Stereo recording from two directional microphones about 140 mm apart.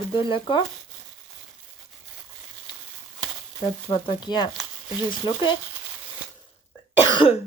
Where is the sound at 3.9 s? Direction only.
35° left (ahead or behind).